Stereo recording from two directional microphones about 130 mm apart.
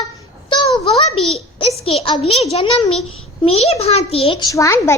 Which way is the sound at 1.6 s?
50° left (ahead or behind).